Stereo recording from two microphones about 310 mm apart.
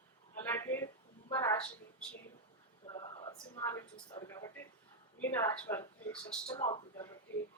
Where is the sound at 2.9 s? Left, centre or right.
Centre.